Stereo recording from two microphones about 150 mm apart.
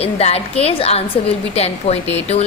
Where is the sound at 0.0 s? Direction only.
45° left (ahead or behind).